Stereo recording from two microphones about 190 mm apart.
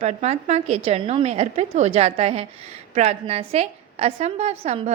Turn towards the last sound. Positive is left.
turn(degrees=-35)  # may be behind; listen again after turning